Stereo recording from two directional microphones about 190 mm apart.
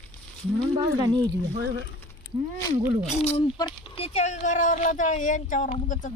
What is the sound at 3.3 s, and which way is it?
Speech, 25° left (ahead or behind).